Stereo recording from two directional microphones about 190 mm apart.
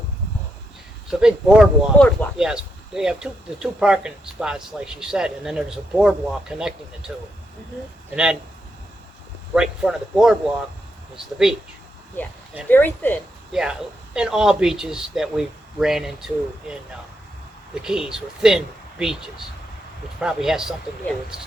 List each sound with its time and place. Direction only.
1.2 s speech: 5° right (ahead or behind)
9.6 s speech: 5° right (ahead or behind)
12.6 s speech: 10° left (ahead or behind)
13.5 s speech: 5° right (ahead or behind)
17.8 s speech: 5° right (ahead or behind)